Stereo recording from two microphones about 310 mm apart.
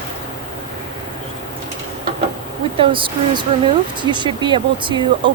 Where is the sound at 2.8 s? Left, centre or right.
Centre.